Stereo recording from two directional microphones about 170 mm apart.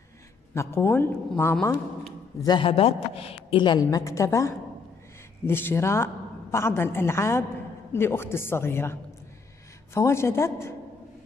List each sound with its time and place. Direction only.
0.6 s a woman's voice: 15° left (ahead or behind)
2.4 s a woman's voice: 30° left (ahead or behind)
9.9 s a woman's voice: 15° left (ahead or behind)